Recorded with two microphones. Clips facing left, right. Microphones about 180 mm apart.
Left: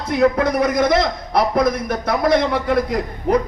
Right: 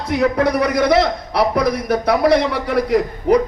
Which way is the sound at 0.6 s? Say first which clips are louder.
Right 1 dB; 50° left (ahead or behind).